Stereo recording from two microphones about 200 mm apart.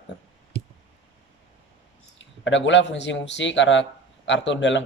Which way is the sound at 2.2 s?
65° left (ahead or behind).